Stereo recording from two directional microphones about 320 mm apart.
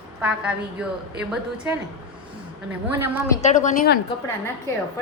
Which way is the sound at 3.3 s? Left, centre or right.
Left.